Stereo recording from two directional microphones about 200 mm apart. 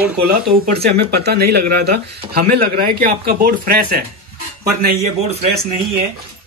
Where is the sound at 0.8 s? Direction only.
55° right (ahead or behind).